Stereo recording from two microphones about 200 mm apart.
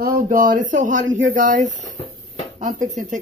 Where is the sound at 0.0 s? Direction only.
45° right (ahead or behind).